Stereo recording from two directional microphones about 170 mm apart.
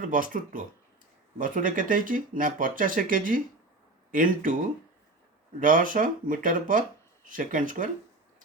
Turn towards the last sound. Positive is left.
turn(degrees=-50)  # may be behind; listen again after turning